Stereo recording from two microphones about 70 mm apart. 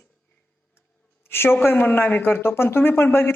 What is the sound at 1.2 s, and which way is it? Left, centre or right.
A woman's voice, left.